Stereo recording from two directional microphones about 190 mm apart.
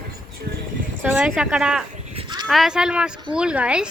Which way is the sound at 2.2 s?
25° right (ahead or behind).